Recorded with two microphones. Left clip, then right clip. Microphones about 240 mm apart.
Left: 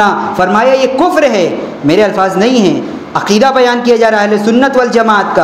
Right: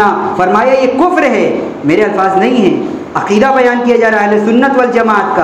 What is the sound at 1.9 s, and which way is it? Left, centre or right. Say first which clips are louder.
A man's voice: left 1 dB; left.